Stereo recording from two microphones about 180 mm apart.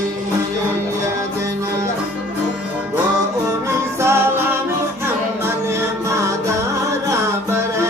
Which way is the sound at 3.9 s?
15° right (ahead or behind).